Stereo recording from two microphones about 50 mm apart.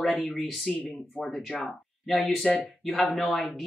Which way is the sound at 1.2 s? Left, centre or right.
Centre.